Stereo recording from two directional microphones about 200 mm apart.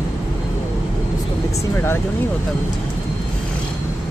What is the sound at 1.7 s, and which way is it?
Speech, 10° left (ahead or behind).